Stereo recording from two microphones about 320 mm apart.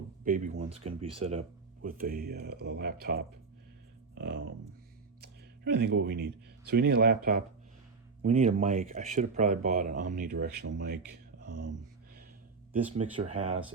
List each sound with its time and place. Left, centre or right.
0.3 s speech: right
11.6 s a sound: right
13.2 s speech: right